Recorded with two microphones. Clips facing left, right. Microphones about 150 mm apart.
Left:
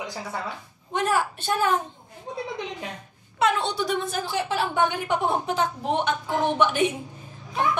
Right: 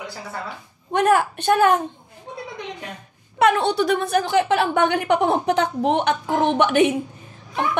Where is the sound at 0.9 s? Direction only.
60° right (ahead or behind).